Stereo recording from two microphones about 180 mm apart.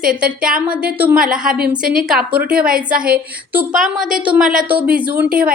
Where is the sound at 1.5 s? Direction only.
50° right (ahead or behind).